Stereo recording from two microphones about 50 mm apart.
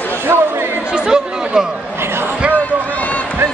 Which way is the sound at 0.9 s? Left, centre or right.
Centre.